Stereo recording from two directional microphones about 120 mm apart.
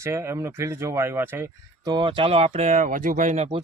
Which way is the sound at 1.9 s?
40° right (ahead or behind).